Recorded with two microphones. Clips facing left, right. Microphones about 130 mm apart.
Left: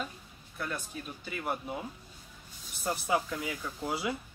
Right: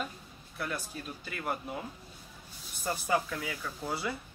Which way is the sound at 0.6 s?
Centre (ahead or behind).